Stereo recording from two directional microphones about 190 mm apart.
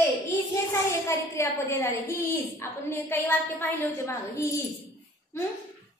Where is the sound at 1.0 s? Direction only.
15° left (ahead or behind).